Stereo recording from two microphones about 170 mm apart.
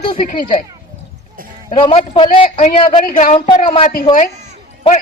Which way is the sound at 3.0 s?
50° left (ahead or behind).